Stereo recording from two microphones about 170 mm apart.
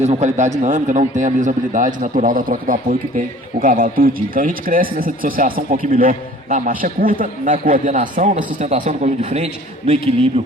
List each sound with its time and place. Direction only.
0.0 s speech: 40° right (ahead or behind)